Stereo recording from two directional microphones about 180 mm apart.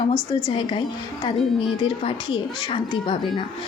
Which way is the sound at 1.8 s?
30° left (ahead or behind).